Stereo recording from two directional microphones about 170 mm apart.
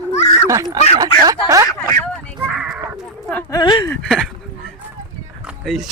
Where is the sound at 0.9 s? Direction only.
20° right (ahead or behind).